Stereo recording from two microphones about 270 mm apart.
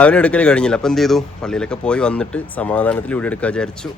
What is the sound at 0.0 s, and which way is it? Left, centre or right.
Speech, centre.